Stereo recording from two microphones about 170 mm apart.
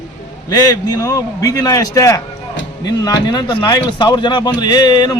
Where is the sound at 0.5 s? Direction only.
20° left (ahead or behind).